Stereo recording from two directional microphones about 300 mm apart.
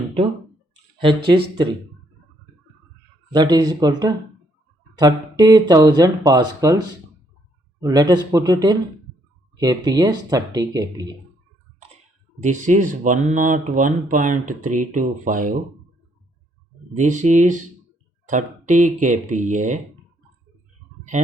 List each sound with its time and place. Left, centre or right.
3.3 s speech: centre
7.8 s speech: centre
12.4 s speech: right
16.9 s speech: right